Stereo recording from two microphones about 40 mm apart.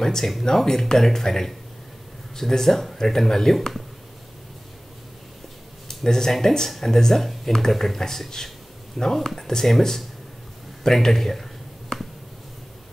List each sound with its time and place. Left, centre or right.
0.0 s speech: centre
3.5 s speech: centre
5.9 s speech: centre